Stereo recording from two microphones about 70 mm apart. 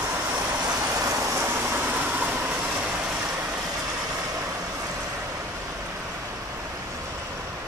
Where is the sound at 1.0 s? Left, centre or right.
Right.